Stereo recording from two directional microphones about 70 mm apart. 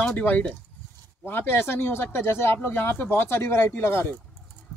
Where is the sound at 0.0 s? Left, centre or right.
Left.